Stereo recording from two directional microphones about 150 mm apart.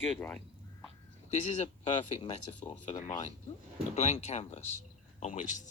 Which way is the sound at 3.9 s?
50° left (ahead or behind).